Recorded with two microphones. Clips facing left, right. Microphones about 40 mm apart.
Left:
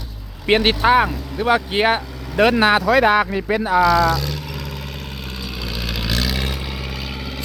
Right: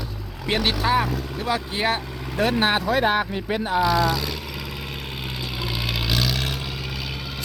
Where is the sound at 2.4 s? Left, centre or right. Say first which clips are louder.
Left 6 dB; left.